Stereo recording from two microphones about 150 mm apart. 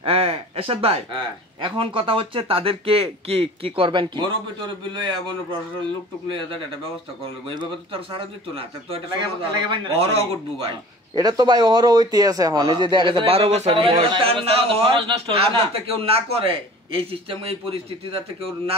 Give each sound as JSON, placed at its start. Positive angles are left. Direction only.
{"t": 0.0, "sound": "a sound", "side_deg": -40}
{"t": 1.6, "sound": "a man's voice", "side_deg": -35}
{"t": 7.4, "sound": "a man's voice", "side_deg": -35}
{"t": 11.1, "sound": "a man's voice", "side_deg": -25}